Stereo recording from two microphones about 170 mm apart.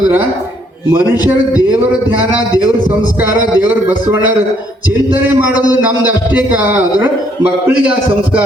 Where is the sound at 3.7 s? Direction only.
10° right (ahead or behind).